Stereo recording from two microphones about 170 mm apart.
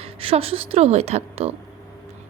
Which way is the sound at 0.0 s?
35° right (ahead or behind).